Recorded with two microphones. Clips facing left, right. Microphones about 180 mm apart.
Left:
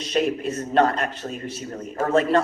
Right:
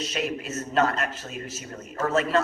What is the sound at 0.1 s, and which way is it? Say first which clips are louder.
Speech: left 9 dB; 45° left (ahead or behind).